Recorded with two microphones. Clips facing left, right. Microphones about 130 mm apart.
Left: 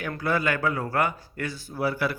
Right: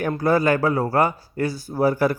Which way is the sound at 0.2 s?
40° right (ahead or behind).